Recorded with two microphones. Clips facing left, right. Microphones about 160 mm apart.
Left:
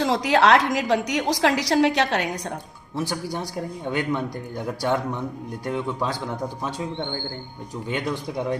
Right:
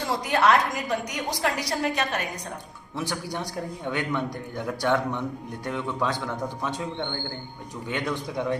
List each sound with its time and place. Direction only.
0.0 s a woman's voice: 90° left
2.9 s a man's voice: 10° left (ahead or behind)
7.9 s speech: 35° left (ahead or behind)